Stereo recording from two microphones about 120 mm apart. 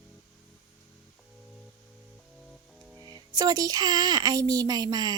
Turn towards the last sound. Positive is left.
turn(degrees=-35)  # may be behind; listen again after turning